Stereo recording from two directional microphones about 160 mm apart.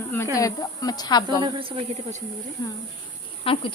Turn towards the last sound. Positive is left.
turn(degrees=35)  # may be behind; listen again after turning